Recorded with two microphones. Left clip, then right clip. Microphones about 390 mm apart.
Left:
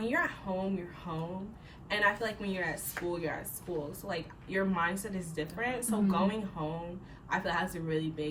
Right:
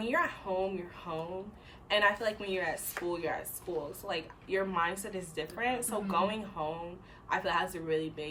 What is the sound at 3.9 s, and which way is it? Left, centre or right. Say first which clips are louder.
Speech: right 1 dB; centre.